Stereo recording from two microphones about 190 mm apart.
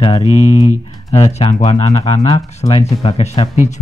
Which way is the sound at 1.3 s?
35° left (ahead or behind).